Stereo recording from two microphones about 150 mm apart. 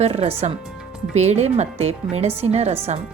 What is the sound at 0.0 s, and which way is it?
A woman's voice, 45° right (ahead or behind).